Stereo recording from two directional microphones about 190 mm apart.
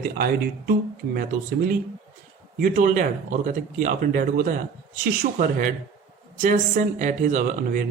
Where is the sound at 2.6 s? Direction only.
45° right (ahead or behind).